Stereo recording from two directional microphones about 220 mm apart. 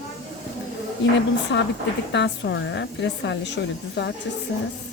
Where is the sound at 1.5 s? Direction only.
55° left (ahead or behind).